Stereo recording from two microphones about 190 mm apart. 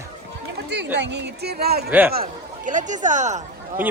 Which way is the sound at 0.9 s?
65° right (ahead or behind).